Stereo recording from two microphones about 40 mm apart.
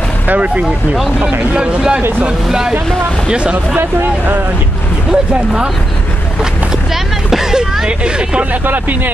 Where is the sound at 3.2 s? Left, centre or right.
Right.